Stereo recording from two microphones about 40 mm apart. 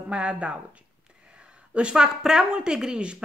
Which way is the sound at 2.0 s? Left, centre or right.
Centre.